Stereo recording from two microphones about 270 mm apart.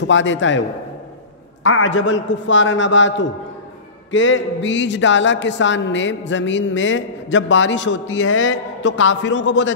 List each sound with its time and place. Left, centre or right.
0.0 s speech: left